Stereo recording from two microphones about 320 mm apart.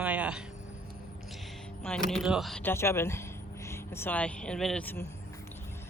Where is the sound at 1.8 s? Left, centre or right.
Centre.